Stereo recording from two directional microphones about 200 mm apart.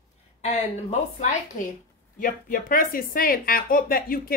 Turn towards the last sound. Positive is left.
turn(degrees=45)  # may be behind; listen again after turning